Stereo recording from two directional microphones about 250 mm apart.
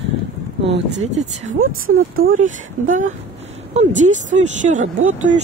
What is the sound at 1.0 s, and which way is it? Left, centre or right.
Speech, right.